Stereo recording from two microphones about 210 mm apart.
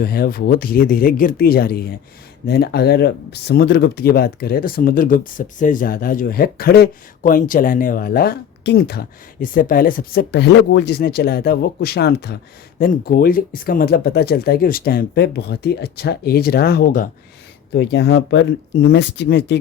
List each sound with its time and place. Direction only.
0.0 s speech: 45° left (ahead or behind)
17.7 s speech: 60° left (ahead or behind)